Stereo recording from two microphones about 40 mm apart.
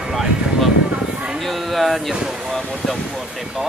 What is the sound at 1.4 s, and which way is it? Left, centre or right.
Speech, centre.